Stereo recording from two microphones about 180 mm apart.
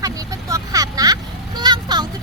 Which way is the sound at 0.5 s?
20° right (ahead or behind).